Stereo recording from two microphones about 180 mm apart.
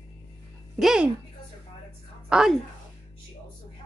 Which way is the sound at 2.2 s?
Centre (ahead or behind).